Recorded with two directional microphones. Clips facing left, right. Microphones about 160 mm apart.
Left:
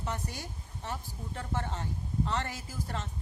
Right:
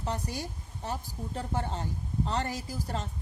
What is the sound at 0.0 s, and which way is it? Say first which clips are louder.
A woman's voice: right 3 dB; 35° right (ahead or behind).